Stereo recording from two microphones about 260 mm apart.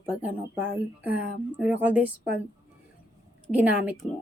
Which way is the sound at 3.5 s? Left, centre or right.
Centre.